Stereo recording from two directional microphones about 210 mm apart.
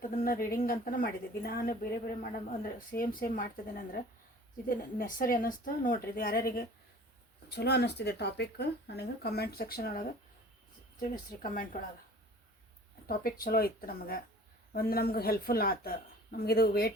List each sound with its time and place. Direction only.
0.3 s a woman's voice: 45° left (ahead or behind)
13.1 s speech: 45° left (ahead or behind)